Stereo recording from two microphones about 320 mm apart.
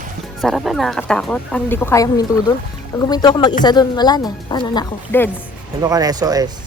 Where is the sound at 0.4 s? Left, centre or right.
Centre.